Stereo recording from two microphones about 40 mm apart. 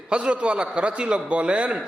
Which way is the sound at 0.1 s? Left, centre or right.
Right.